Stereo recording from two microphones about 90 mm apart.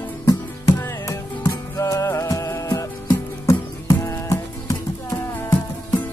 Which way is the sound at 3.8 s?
40° left (ahead or behind).